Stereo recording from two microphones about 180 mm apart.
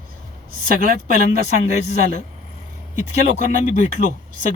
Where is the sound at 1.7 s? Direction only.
40° left (ahead or behind).